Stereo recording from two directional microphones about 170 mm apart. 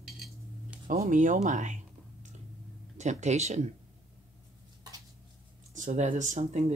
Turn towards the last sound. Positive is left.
turn(degrees=-45)  # may be behind; listen again after turning